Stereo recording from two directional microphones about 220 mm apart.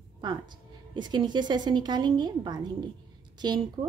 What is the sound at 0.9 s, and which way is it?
Speech, 20° right (ahead or behind).